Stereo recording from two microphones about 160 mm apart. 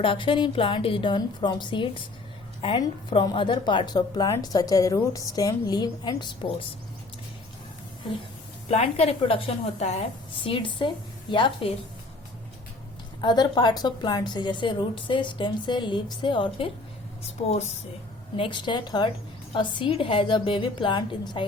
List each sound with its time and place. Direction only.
0.0 s a woman's voice: 35° left (ahead or behind)
8.7 s a woman's voice: 40° left (ahead or behind)
10.4 s a woman's voice: 30° left (ahead or behind)
13.2 s speech: 25° left (ahead or behind)
17.2 s a woman's voice: 40° left (ahead or behind)
18.3 s a woman's voice: 30° left (ahead or behind)